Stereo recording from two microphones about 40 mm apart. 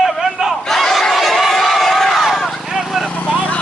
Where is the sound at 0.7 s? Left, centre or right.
Centre.